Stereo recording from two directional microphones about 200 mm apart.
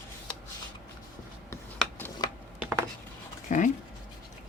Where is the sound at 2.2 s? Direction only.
20° left (ahead or behind).